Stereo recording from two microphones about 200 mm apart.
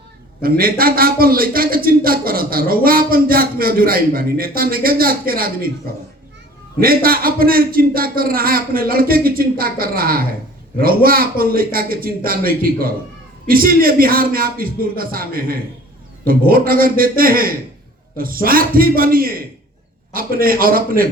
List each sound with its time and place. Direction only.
0.4 s a man's voice: 50° right (ahead or behind)
6.8 s a man's voice: 45° right (ahead or behind)